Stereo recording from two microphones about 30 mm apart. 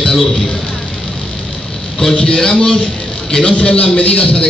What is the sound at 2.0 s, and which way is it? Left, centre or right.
A man's voice, centre.